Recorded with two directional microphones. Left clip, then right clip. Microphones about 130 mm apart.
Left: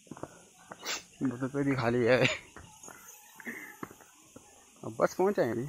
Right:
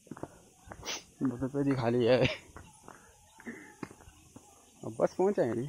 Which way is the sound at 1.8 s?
20° right (ahead or behind).